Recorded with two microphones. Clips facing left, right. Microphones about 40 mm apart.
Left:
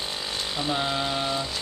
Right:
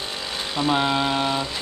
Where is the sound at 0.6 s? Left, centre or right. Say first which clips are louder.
Right 7 dB; right.